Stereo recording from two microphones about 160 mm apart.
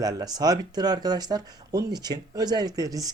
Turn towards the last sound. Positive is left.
turn(degrees=-20)  # may be behind; listen again after turning